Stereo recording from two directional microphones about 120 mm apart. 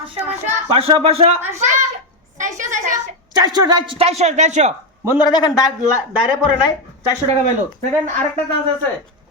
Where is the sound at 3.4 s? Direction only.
35° right (ahead or behind); by 4.7 s 75° right (ahead or behind).